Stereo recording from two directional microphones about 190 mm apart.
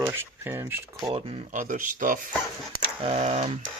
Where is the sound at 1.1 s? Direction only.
35° right (ahead or behind).